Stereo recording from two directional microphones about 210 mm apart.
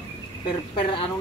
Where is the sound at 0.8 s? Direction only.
25° left (ahead or behind).